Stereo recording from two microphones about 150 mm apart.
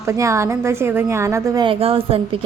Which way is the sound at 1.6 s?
40° right (ahead or behind).